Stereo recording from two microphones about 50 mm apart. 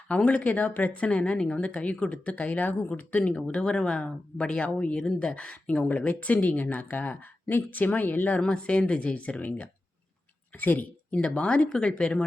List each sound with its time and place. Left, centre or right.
0.1 s speech: left
3.6 s speech: centre; by 8.4 s left
8.4 s speech: centre; by 10.8 s left
11.1 s speech: left